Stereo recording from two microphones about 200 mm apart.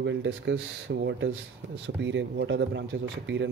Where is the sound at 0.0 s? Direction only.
65° right (ahead or behind).